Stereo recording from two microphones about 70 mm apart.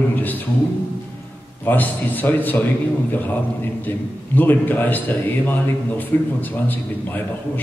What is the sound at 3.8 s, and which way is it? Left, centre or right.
A man's voice, left.